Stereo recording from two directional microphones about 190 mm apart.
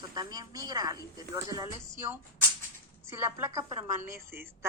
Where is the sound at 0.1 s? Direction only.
20° right (ahead or behind).